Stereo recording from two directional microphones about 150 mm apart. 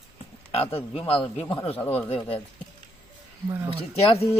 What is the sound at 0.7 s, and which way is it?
Speech, 40° left (ahead or behind).